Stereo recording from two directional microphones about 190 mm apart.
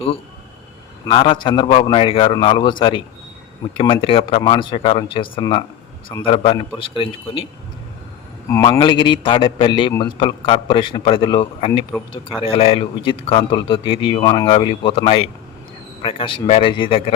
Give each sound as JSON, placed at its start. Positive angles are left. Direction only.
{"t": 1.0, "sound": "a man's voice", "side_deg": 25}
{"t": 8.6, "sound": "a man's voice", "side_deg": 25}